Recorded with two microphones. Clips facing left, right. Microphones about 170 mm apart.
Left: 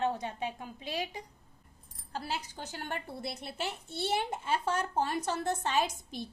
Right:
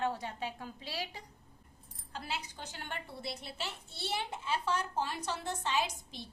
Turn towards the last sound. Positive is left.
turn(degrees=50)  # may be behind; listen again after turning